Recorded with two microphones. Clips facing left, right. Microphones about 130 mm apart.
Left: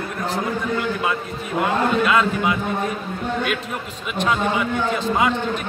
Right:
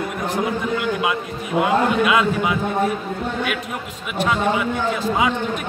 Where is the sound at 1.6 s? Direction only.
10° right (ahead or behind).